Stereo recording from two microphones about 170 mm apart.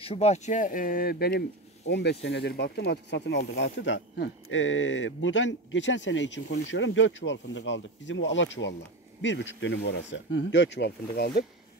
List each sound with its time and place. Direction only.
0.0 s speech: 35° left (ahead or behind); by 1.4 s 65° left (ahead or behind)
1.9 s speech: 85° left